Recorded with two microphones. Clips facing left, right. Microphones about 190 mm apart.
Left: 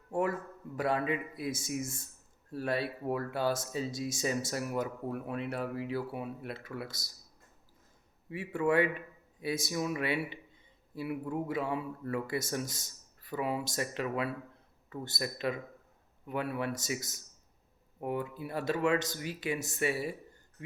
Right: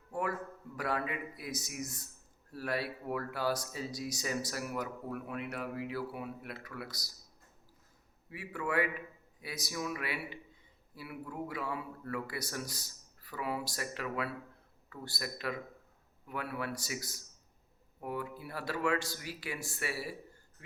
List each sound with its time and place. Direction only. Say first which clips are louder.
0.1 s a man's voice: left 4 dB; 25° left (ahead or behind)
8.3 s speech: left 7 dB; 25° left (ahead or behind)